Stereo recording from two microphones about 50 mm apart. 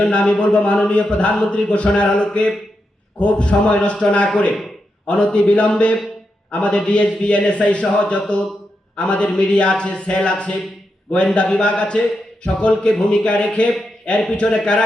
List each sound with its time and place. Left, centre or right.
0.0 s a man's voice: left